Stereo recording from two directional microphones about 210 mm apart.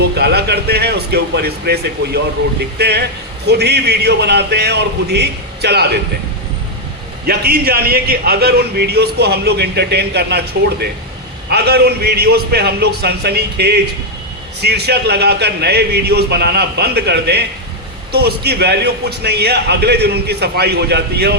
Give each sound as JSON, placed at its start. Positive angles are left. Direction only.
{"t": 0.0, "sound": "a man's voice", "side_deg": -50}
{"t": 7.3, "sound": "a man's voice", "side_deg": -50}